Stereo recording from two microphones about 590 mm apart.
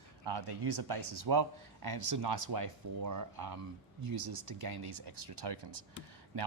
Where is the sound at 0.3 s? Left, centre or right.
Right.